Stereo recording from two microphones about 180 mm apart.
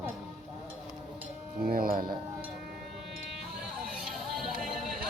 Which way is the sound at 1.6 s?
55° right (ahead or behind).